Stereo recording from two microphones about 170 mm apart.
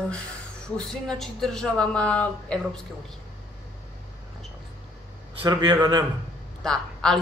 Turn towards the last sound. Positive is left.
turn(degrees=5)  # may be behind; listen again after turning